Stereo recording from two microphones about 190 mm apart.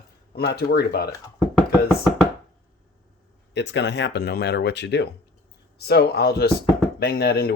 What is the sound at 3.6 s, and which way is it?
Speech, 65° left (ahead or behind).